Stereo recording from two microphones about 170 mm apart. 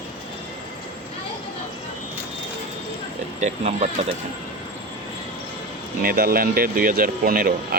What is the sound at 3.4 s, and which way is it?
Speech, 40° right (ahead or behind).